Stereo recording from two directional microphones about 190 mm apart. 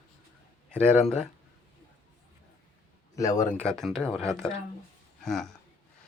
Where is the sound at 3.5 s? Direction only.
5° left (ahead or behind).